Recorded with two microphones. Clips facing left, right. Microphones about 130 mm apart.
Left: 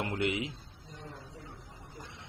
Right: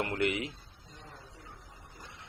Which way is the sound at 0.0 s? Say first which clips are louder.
Right 1 dB; 20° left (ahead or behind).